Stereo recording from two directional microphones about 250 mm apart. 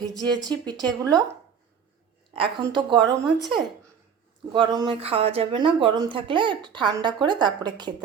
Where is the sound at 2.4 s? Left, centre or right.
Centre.